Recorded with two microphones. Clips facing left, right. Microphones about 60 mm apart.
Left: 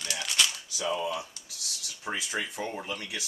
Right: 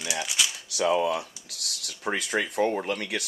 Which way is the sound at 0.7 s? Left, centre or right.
Right.